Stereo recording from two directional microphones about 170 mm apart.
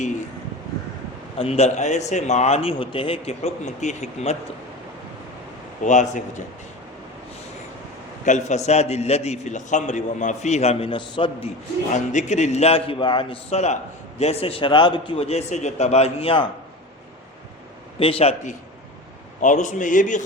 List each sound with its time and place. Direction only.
1.4 s a man's voice: 35° left (ahead or behind)
5.8 s a man's voice: 45° left (ahead or behind)
8.2 s a man's voice: 45° left (ahead or behind)
11.9 s a man's voice: 45° left (ahead or behind)
18.0 s a man's voice: 35° left (ahead or behind)
19.4 s a man's voice: 45° left (ahead or behind)